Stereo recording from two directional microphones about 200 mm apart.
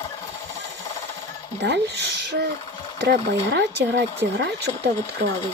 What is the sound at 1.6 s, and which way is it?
Speech, 60° right (ahead or behind).